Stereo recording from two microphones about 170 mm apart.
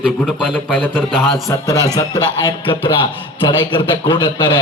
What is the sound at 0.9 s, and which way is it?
Speech, centre (ahead or behind).